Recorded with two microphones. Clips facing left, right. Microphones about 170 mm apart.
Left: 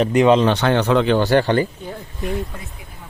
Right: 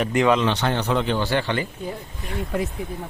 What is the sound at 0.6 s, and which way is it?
Speech, 80° left.